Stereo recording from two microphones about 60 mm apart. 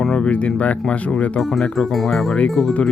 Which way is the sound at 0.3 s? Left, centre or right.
Left.